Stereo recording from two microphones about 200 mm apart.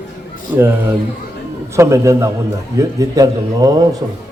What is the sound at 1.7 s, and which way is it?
A man's voice, 15° right (ahead or behind).